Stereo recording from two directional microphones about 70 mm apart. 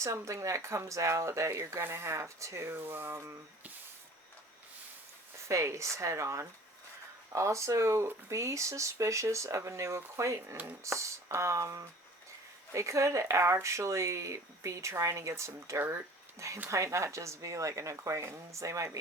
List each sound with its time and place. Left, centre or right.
0.0 s speech: right
5.5 s speech: right